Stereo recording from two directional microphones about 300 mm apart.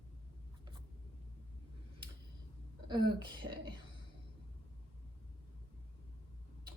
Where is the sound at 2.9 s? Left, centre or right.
Centre.